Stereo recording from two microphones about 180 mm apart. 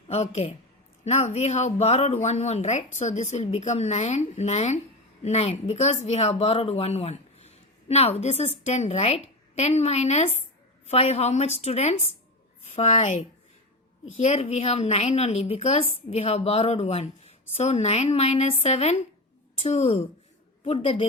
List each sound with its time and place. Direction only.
0.1 s speech: 35° left (ahead or behind)